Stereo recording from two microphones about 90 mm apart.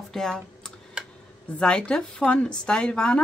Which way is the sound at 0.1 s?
5° left (ahead or behind).